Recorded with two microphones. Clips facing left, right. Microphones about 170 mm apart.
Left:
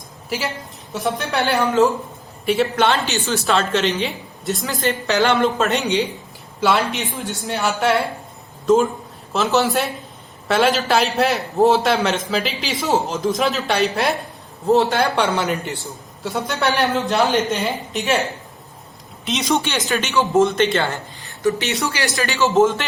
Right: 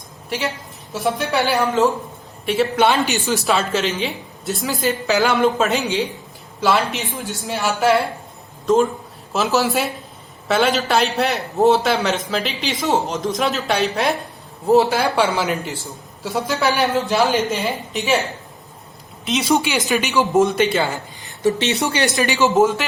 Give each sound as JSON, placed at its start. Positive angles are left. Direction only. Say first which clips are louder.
{"t": 0.3, "sound": "a woman's voice", "louder": "right 1 dB", "side_deg": 0}
{"t": 19.2, "sound": "speech", "louder": "right 2 dB", "side_deg": 0}
{"t": 20.3, "sound": "a man's voice", "louder": "left 1 dB", "side_deg": 0}
{"t": 21.2, "sound": "a sound", "louder": "right 2 dB", "side_deg": -20}
{"t": 21.9, "sound": "speech", "louder": "right 3 dB", "side_deg": -20}